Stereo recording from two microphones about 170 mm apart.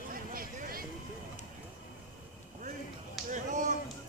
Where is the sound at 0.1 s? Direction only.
60° right (ahead or behind).